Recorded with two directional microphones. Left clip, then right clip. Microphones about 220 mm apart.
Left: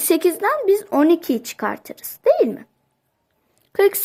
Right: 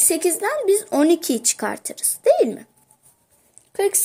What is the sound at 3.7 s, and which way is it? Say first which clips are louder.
Speech: left 5 dB; 20° left (ahead or behind).